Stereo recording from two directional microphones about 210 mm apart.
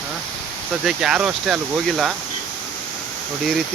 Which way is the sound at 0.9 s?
5° right (ahead or behind).